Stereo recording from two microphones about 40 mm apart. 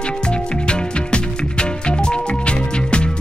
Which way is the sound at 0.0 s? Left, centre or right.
Left.